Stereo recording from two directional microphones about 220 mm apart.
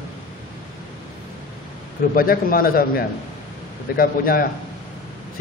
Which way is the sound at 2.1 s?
40° left (ahead or behind).